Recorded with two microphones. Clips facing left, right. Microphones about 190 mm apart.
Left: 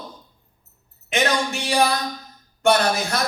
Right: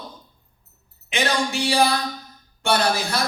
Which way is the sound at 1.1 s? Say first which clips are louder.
Left 1 dB; 30° right (ahead or behind).